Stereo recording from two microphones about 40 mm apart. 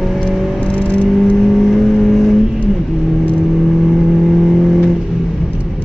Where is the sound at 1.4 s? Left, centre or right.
Centre.